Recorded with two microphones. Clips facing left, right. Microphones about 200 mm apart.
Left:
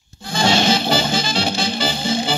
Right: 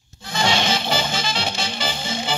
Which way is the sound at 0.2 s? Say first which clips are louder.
Left 4 dB; 35° left (ahead or behind).